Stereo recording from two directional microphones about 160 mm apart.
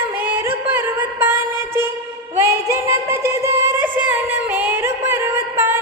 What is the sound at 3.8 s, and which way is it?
Music, 10° right (ahead or behind).